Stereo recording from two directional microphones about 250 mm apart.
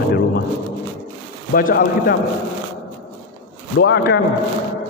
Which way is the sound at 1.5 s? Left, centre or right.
Left.